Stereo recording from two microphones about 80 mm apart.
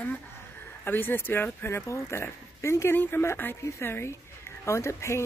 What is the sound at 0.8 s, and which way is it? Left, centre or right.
Speech, left.